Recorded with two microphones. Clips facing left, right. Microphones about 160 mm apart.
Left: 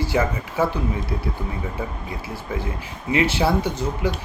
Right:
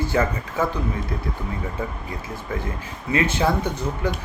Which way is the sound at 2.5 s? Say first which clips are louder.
Left 1 dB; 10° left (ahead or behind).